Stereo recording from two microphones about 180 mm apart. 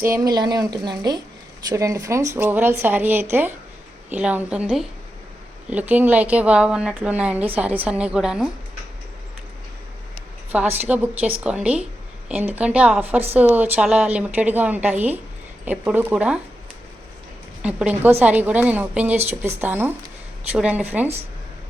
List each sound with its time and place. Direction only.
0.0 s a woman's voice: 15° right (ahead or behind)
10.5 s a woman's voice: 10° right (ahead or behind)
17.6 s a woman's voice: 5° right (ahead or behind)